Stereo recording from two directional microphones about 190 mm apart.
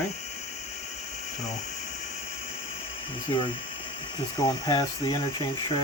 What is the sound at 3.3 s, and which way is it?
Speech, 25° left (ahead or behind).